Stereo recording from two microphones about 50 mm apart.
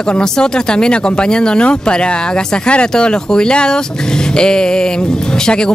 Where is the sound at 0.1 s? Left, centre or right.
Centre.